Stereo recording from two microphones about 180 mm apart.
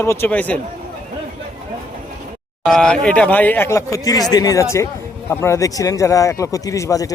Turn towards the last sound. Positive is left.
turn(degrees=20)  # may be behind; listen again after turning